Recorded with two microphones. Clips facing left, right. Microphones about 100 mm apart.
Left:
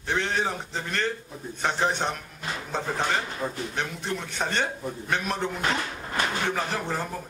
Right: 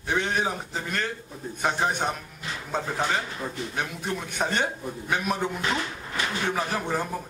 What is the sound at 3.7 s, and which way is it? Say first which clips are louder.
A man's voice: even; 10° right (ahead or behind).